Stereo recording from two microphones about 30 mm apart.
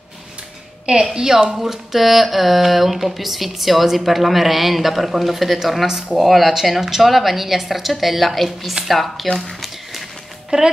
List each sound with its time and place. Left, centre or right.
1.1 s speech: right
1.6 s speech: centre
10.5 s speech: right